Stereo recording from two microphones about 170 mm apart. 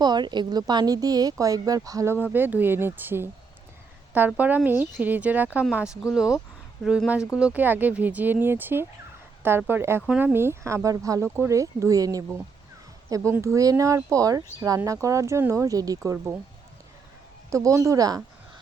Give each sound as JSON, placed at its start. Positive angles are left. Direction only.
{"t": 0.0, "sound": "speech", "side_deg": -25}
{"t": 4.3, "sound": "speech", "side_deg": -10}
{"t": 17.5, "sound": "speech", "side_deg": -20}